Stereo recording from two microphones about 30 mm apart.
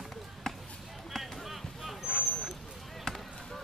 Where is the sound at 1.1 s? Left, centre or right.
Centre.